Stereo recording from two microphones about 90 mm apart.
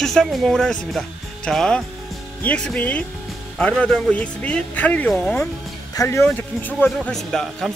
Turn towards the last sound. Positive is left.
turn(degrees=5)  # may be behind; listen again after turning